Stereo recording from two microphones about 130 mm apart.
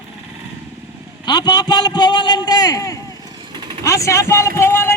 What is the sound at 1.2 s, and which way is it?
A man's voice, 30° left (ahead or behind).